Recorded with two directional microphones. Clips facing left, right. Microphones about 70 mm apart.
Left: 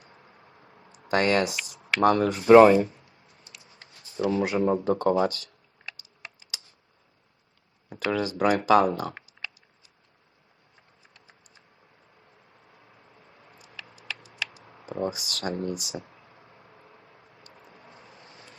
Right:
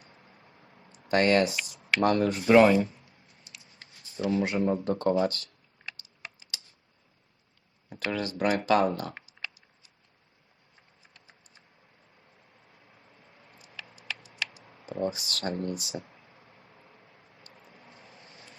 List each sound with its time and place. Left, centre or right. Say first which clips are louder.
0.1 s a sound: left 2 dB; centre
2.4 s speech: left 6 dB; left
4.3 s speech: left 2 dB; centre
7.9 s speech: left 4 dB; centre
13.6 s a sound: left 1 dB; centre
13.9 s typing: even; centre
14.6 s speech: left 1 dB; centre
16.6 s a sound: left 3 dB; centre
17.8 s vehicle: left 2 dB; centre